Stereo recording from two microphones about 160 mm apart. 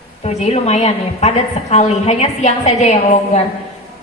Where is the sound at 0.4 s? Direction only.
45° left (ahead or behind).